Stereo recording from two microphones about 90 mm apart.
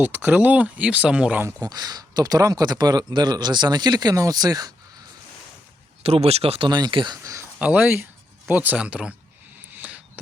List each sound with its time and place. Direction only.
0.0 s speech: 20° right (ahead or behind)
1.5 s speech: 40° right (ahead or behind)
6.0 s speech: 90° right
6.7 s speech: 55° right (ahead or behind)
7.2 s speech: 35° right (ahead or behind)
7.6 s speech: 15° right (ahead or behind)
9.7 s a sound: 15° right (ahead or behind)